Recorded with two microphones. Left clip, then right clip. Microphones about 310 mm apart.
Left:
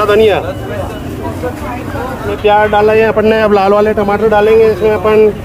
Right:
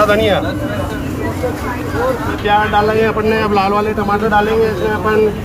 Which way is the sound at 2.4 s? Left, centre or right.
Left.